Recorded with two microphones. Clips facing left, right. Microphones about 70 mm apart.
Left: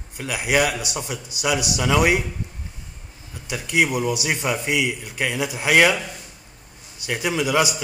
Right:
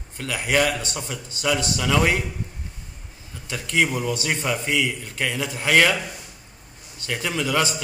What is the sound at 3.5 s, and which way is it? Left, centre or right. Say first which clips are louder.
A man's voice: left 1 dB; centre.